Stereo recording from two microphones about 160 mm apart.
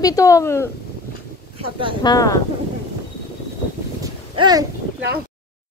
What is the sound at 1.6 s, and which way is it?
Speech, 35° right (ahead or behind).